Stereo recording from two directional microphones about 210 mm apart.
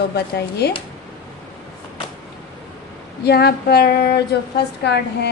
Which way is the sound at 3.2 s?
50° left (ahead or behind).